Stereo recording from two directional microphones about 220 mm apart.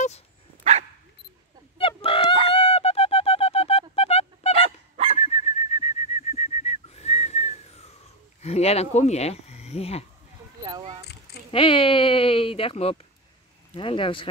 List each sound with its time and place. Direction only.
1.8 s fowl: 25° left (ahead or behind)
5.1 s bird: 30° left (ahead or behind)
8.4 s speech: 30° left (ahead or behind)
11.5 s speech: 25° left (ahead or behind)